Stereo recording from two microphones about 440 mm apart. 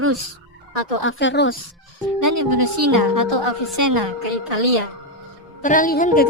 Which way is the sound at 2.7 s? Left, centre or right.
Right.